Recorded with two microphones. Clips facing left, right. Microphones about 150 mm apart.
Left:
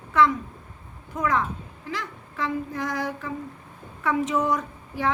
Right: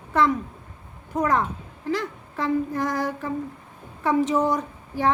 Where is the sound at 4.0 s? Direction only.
35° right (ahead or behind).